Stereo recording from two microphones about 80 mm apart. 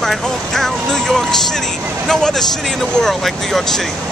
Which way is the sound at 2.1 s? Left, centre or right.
Centre.